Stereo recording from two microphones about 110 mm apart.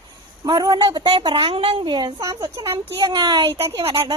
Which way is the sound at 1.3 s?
50° right (ahead or behind).